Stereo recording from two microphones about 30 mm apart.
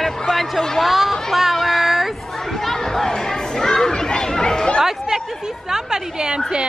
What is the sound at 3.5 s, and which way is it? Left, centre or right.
Children playing, centre.